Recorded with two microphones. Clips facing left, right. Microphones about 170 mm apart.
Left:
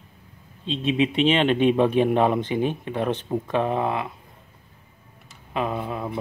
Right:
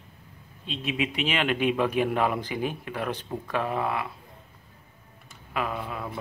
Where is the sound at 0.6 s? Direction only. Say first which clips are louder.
Left 7 dB; 25° left (ahead or behind).